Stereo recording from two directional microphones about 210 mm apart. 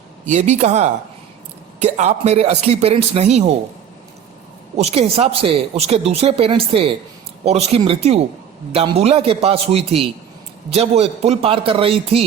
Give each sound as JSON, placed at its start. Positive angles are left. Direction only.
{"t": 0.3, "sound": "speech", "side_deg": -35}
{"t": 4.8, "sound": "speech", "side_deg": -30}